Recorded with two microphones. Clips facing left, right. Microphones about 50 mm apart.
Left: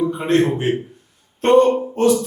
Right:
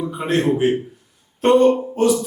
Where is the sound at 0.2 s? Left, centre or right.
Centre.